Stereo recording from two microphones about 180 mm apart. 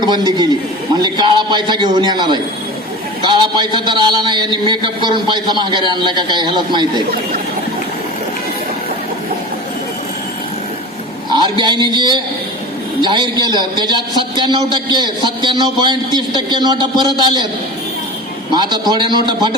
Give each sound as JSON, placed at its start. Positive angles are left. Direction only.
{"t": 0.0, "sound": "a man's voice", "side_deg": -25}
{"t": 11.6, "sound": "a man's voice", "side_deg": -25}
{"t": 18.5, "sound": "a man's voice", "side_deg": -25}